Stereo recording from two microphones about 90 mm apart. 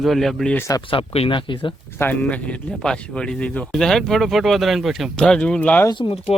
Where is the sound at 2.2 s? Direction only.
15° left (ahead or behind); by 5.1 s 5° right (ahead or behind).